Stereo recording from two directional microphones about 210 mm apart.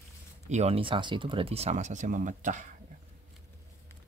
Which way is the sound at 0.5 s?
30° right (ahead or behind).